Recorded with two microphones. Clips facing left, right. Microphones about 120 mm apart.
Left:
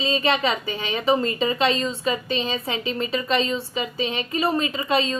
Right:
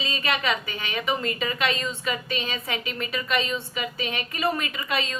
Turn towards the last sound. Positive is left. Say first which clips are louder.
# left 6 dB
turn(degrees=25)  # may be behind; listen again after turning